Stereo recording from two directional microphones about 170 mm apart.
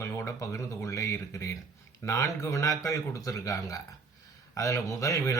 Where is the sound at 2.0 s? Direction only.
15° left (ahead or behind).